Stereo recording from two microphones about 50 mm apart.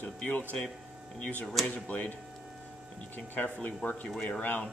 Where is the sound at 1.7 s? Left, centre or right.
Left.